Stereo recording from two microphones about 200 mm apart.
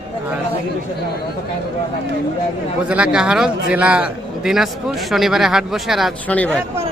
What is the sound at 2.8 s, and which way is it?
A man's voice, 5° right (ahead or behind).